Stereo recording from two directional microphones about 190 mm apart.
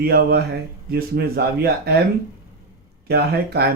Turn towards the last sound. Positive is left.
turn(degrees=-55)  # may be behind; listen again after turning